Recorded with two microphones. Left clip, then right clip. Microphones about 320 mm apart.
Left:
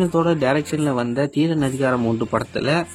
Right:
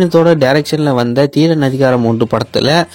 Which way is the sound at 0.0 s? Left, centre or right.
Centre.